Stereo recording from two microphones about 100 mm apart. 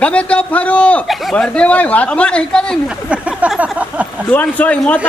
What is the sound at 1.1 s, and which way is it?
Speech, centre (ahead or behind).